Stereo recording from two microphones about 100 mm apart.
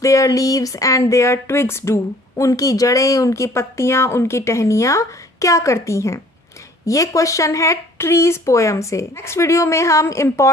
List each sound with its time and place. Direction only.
0.0 s speech: 30° left (ahead or behind)